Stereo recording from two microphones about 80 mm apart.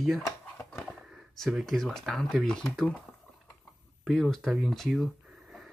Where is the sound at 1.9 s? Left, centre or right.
Centre.